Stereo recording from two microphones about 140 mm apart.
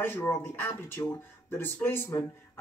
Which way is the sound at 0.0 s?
15° left (ahead or behind).